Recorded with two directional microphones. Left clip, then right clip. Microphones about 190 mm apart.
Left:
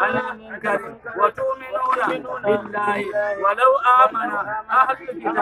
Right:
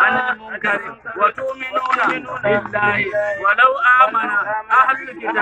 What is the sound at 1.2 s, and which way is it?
Speech, 60° left (ahead or behind).